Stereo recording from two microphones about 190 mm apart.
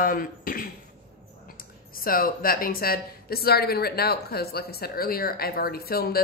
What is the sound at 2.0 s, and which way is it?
Speech, 50° left (ahead or behind).